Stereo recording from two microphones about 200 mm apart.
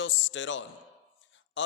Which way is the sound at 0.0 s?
70° left (ahead or behind).